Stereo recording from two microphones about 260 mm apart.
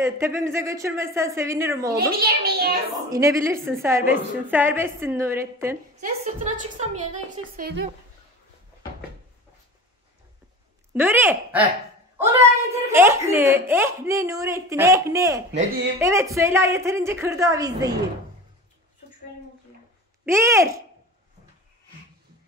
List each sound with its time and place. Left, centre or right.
0.0 s a child's voice: centre
2.0 s a child's voice: right
3.1 s a child's voice: centre
5.9 s a woman's voice: right
10.9 s a child's voice: centre
20.2 s a child's voice: centre